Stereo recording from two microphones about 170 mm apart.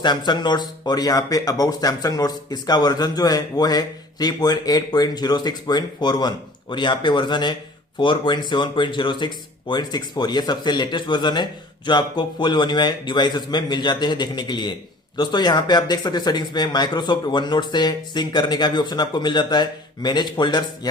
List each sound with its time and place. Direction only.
0.0 s speech: 25° left (ahead or behind)